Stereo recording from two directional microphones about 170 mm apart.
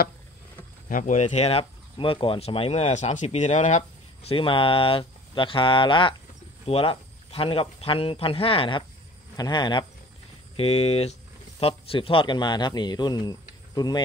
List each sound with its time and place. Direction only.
0.8 s speech: 50° left (ahead or behind); by 14.0 s 25° left (ahead or behind)